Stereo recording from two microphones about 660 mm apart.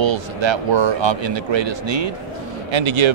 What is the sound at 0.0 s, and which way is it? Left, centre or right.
Speech, right.